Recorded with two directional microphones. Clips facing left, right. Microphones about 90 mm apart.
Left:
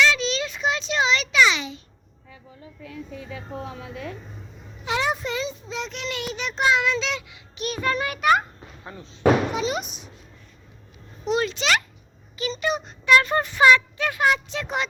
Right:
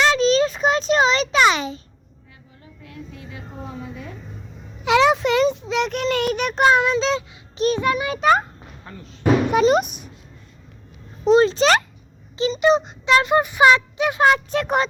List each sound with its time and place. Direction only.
0.0 s a sound: 40° right (ahead or behind)
3.6 s a woman's voice: 90° left
4.9 s a sound: 90° right; by 6.0 s 70° right (ahead or behind)
6.0 s child singing: 50° right (ahead or behind)
6.8 s child singing: 30° right (ahead or behind)
7.9 s speech: 20° right (ahead or behind)
8.8 s speech: 20° left (ahead or behind)
9.5 s speech: 50° right (ahead or behind)
11.3 s speech: 35° right (ahead or behind)
12.4 s speech: 25° right (ahead or behind)
14.3 s speech: 55° right (ahead or behind)